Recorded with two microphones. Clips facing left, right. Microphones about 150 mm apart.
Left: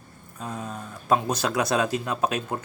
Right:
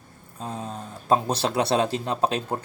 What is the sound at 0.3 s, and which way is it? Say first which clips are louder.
A man's voice: right 1 dB; 30° right (ahead or behind).